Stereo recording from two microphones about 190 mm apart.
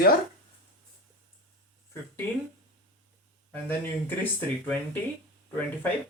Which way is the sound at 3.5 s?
10° left (ahead or behind).